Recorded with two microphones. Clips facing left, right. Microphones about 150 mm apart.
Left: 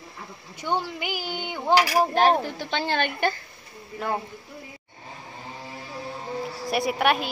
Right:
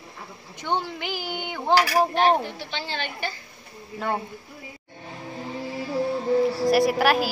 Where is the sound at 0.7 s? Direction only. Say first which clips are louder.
Even; 10° left (ahead or behind).